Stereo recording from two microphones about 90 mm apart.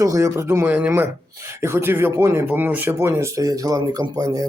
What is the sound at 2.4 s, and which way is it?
Speech, 20° right (ahead or behind).